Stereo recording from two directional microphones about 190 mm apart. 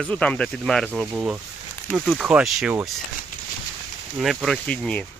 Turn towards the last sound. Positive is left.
turn(degrees=5)  # may be behind; listen again after turning